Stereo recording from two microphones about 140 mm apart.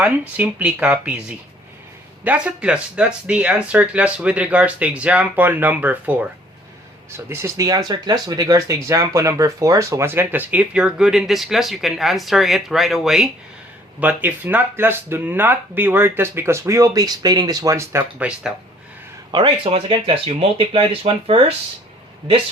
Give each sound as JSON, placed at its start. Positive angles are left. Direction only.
{"t": 0.0, "sound": "speech", "side_deg": -10}
{"t": 7.3, "sound": "speech", "side_deg": -20}
{"t": 14.0, "sound": "speech", "side_deg": -10}
{"t": 18.2, "sound": "speech", "side_deg": -5}
{"t": 19.3, "sound": "speech", "side_deg": -40}